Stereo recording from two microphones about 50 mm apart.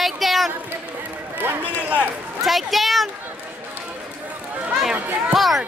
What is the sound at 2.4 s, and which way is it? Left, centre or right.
Speech, centre.